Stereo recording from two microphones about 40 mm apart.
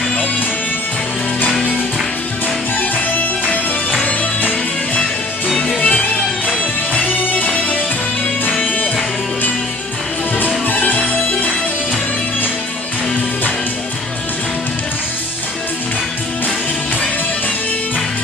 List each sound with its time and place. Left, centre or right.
2.8 s music: left
5.8 s music: left
6.9 s music: left
10.4 s music: left